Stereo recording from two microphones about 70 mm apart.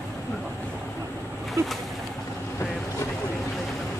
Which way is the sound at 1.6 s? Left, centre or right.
Right.